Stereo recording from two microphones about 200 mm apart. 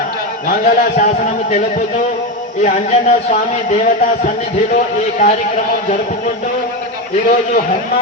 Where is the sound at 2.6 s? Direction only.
35° left (ahead or behind).